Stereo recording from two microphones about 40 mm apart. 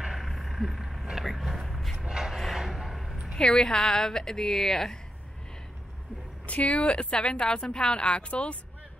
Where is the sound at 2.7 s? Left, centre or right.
Centre.